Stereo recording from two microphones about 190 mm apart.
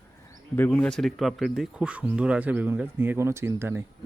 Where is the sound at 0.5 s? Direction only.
10° left (ahead or behind).